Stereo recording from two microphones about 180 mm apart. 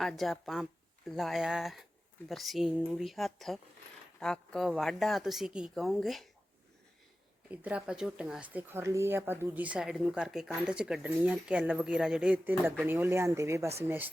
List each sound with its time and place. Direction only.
0.0 s speech: centre (ahead or behind)
7.5 s speech: 10° right (ahead or behind)